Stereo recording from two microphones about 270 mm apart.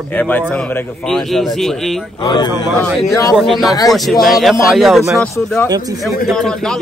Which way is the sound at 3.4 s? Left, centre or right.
Centre.